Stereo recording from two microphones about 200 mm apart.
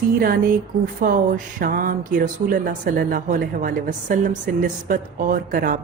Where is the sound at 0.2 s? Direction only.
45° right (ahead or behind).